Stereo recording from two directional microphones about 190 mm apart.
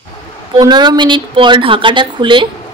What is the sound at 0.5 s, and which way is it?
Speech, 20° right (ahead or behind).